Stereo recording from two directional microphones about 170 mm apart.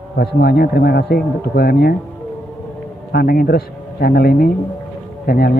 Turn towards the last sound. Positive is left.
turn(degrees=65)  # may be behind; listen again after turning